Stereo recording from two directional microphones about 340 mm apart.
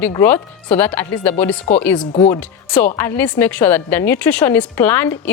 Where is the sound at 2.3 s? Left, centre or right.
Centre.